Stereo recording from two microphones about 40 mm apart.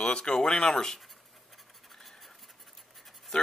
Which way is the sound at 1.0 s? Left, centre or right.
Centre.